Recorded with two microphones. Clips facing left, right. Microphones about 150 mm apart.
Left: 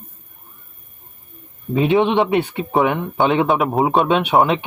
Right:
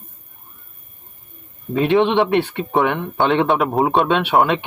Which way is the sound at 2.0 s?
15° left (ahead or behind).